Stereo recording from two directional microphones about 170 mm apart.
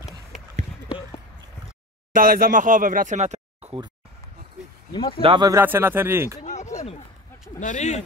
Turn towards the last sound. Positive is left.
turn(degrees=45)  # may be behind; listen again after turning